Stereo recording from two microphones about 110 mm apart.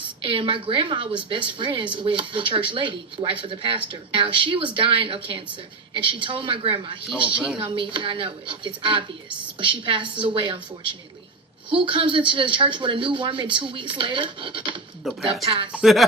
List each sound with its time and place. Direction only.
0.2 s a woman's voice: 55° right (ahead or behind)
7.3 s speech: 10° right (ahead or behind)
7.6 s a woman's voice: 50° right (ahead or behind)
15.0 s speech: centre (ahead or behind)
15.4 s speech: 55° right (ahead or behind)
15.7 s speech: centre (ahead or behind)